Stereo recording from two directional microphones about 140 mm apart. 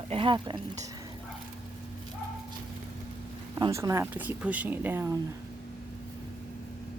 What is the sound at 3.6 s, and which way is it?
Speech, 25° right (ahead or behind).